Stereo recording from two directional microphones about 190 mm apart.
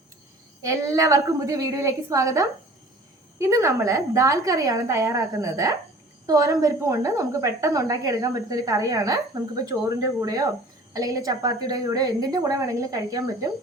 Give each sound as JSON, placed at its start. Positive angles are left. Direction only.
{"t": 0.6, "sound": "a woman's voice", "side_deg": -15}